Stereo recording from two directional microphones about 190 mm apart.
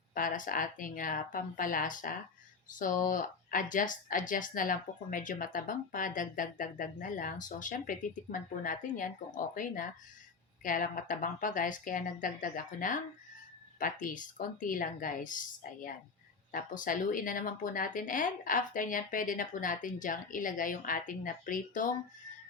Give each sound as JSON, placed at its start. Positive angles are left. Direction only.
{"t": 0.1, "sound": "speech", "side_deg": 45}